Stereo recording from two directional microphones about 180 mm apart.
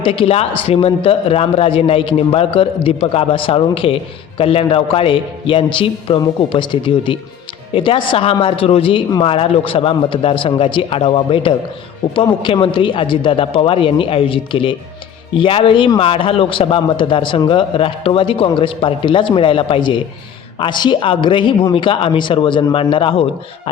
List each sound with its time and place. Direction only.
0.0 s a man's voice: 30° left (ahead or behind)